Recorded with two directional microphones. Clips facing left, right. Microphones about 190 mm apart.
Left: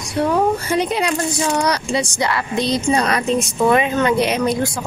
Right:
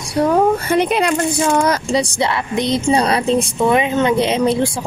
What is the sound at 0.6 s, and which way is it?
Speech, 60° right (ahead or behind).